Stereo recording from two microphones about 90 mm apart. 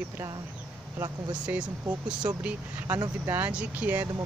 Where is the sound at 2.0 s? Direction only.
10° right (ahead or behind).